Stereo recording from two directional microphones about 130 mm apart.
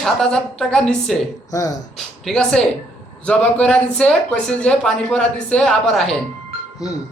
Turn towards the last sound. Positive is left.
turn(degrees=-5)  # may be behind; listen again after turning